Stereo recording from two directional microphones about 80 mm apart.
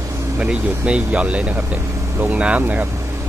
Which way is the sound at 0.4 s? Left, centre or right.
Centre.